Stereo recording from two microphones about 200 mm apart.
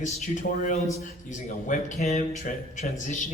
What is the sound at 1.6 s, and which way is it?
A man's voice, 35° left (ahead or behind).